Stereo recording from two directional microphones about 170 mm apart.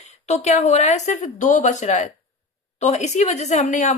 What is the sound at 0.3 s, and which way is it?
A woman's voice, 40° left (ahead or behind).